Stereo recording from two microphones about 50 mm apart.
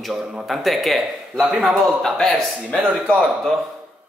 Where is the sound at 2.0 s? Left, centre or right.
Centre.